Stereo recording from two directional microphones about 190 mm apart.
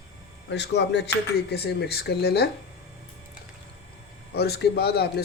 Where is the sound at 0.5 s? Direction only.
65° left (ahead or behind).